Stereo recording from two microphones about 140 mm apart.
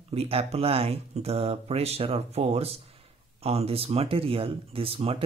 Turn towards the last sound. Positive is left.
turn(degrees=-45)  # may be behind; listen again after turning